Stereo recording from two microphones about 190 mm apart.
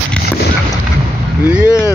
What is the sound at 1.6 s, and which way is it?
Vehicle, 15° left (ahead or behind).